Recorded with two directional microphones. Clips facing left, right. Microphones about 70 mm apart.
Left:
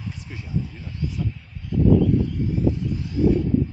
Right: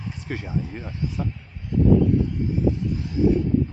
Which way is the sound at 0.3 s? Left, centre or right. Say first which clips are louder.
Right 7 dB; right.